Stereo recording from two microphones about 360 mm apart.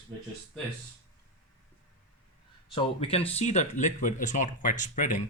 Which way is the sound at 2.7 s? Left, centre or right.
Centre.